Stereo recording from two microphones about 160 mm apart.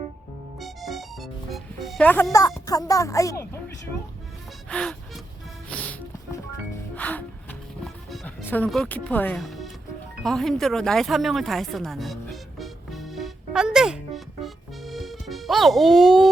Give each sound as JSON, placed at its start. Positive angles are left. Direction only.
{"t": 0.6, "sound": "music", "side_deg": 0}
{"t": 2.6, "sound": "a woman's voice", "side_deg": 25}
{"t": 4.7, "sound": "music", "side_deg": 5}
{"t": 8.4, "sound": "speech", "side_deg": 10}
{"t": 9.4, "sound": "music", "side_deg": 0}
{"t": 10.2, "sound": "speech", "side_deg": 5}
{"t": 14.4, "sound": "music", "side_deg": 0}